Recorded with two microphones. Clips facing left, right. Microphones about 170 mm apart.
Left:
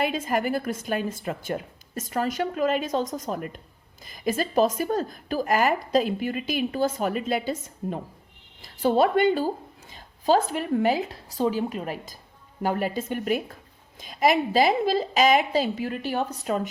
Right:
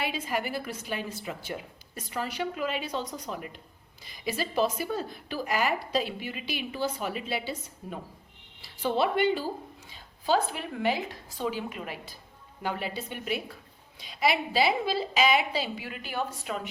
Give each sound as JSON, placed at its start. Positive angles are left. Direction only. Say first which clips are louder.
{"t": 0.0, "sound": "a woman's voice", "louder": "left 6 dB", "side_deg": 50}